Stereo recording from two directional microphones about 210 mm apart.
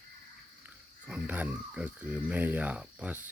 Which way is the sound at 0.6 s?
5° right (ahead or behind).